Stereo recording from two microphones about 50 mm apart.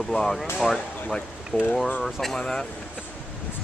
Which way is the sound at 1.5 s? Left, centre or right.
Left.